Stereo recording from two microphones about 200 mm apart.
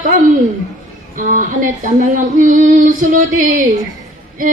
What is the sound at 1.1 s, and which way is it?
Female singing, 40° right (ahead or behind).